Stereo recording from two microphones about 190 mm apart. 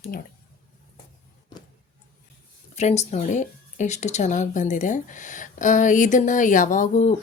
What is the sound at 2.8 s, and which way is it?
A woman's voice, 35° left (ahead or behind).